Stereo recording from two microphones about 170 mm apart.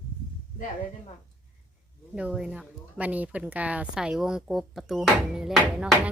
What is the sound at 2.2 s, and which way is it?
A woman's voice, 5° right (ahead or behind).